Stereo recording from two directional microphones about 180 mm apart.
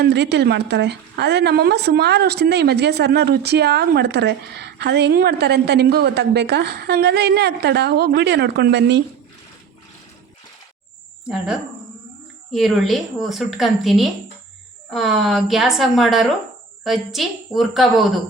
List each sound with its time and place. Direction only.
0.0 s speech: 70° right (ahead or behind)
11.3 s a woman's voice: 5° right (ahead or behind)